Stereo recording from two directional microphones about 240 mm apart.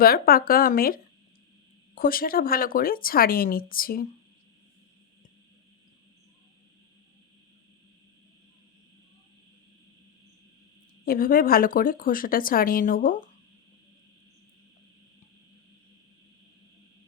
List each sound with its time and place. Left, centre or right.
0.0 s speech: left
2.0 s speech: left
11.0 s speech: left